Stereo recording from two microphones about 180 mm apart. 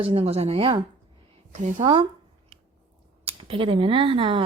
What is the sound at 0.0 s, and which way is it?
Speech, 30° right (ahead or behind).